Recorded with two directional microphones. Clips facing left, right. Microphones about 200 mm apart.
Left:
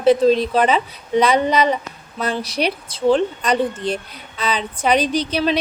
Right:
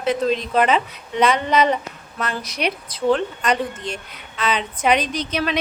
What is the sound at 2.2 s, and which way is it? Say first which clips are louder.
A woman's voice: left 4 dB; 30° left (ahead or behind).